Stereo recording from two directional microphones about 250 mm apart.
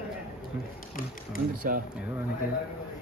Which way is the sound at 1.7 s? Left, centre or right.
Right.